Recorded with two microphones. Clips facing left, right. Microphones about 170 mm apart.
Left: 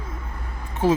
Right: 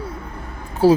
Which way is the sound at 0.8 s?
35° right (ahead or behind).